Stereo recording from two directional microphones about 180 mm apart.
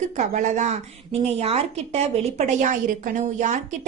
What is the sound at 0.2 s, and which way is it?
A woman's voice, 45° right (ahead or behind).